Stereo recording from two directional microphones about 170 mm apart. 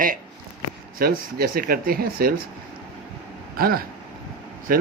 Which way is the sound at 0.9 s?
60° right (ahead or behind).